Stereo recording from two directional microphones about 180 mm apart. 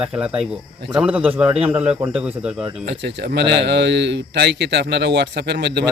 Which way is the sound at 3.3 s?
70° right (ahead or behind).